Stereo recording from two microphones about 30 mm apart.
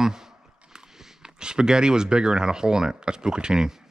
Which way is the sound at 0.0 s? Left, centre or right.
Centre.